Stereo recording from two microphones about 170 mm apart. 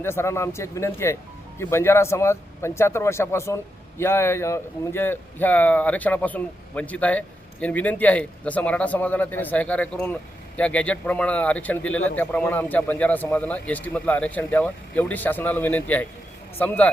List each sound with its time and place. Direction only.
0.0 s speech: 15° left (ahead or behind)